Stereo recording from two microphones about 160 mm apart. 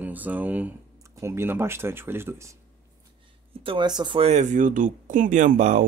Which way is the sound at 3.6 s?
30° right (ahead or behind).